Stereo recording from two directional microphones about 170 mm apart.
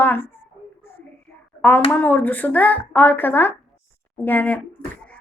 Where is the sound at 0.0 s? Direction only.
10° left (ahead or behind).